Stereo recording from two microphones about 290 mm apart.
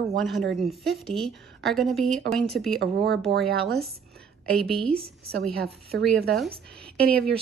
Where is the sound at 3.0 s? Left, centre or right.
Right.